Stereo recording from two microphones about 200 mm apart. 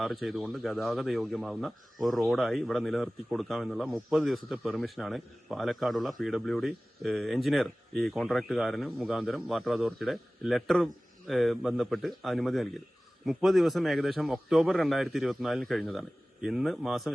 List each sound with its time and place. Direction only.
0.0 s a man's voice: centre (ahead or behind)